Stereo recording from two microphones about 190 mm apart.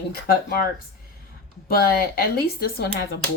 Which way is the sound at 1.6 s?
55° left (ahead or behind).